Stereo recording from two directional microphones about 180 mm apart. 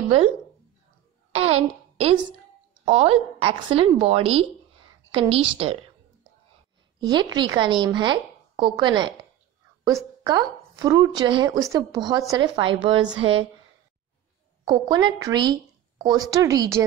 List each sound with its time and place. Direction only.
1.3 s a sound: 35° right (ahead or behind)
2.8 s a woman's voice: 35° right (ahead or behind)
7.0 s a woman's voice: 25° right (ahead or behind)
14.6 s a woman's voice: 25° right (ahead or behind)